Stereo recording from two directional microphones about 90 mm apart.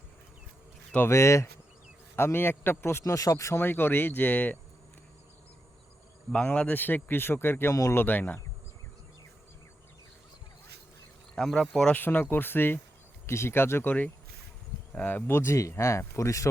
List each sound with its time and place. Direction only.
0.9 s speech: 30° left (ahead or behind)
3.0 s speech: 40° left (ahead or behind)
3.6 s speech: 25° left (ahead or behind)
6.3 s speech: 10° left (ahead or behind)
11.3 s speech: 5° left (ahead or behind)
11.9 s speech: 20° left (ahead or behind)
14.9 s speech: 20° left (ahead or behind); by 16.5 s 35° left (ahead or behind)